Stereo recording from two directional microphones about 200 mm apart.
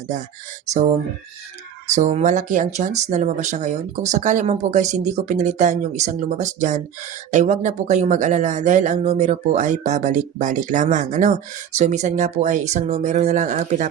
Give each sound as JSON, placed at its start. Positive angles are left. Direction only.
{"t": 0.7, "sound": "speech", "side_deg": -35}
{"t": 2.0, "sound": "speech", "side_deg": -35}